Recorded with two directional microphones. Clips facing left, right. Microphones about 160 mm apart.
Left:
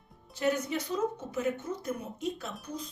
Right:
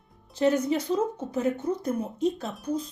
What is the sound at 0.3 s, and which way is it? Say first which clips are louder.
A woman's voice: right 7 dB; 35° right (ahead or behind).